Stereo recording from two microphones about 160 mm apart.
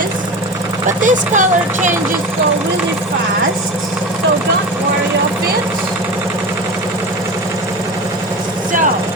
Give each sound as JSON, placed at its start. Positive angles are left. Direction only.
{"t": 1.0, "sound": "speech", "side_deg": -50}